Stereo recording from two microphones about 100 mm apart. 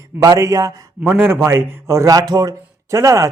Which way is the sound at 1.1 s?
25° right (ahead or behind).